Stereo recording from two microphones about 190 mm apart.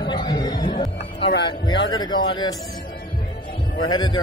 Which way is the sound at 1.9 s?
25° left (ahead or behind).